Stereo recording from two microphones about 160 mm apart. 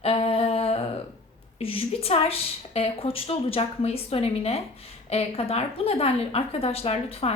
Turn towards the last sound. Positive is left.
turn(degrees=40)  # may be behind; listen again after turning